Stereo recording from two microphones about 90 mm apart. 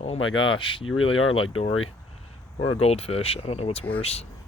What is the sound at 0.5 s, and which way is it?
Speech, 80° left.